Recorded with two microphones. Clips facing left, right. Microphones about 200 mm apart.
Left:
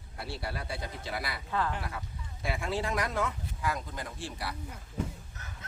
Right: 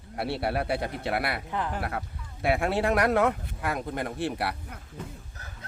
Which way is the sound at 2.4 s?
65° right (ahead or behind).